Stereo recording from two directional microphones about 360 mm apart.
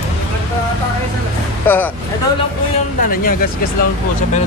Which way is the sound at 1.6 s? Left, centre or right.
Centre.